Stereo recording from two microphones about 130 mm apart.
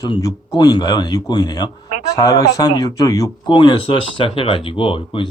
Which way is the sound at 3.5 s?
40° left (ahead or behind).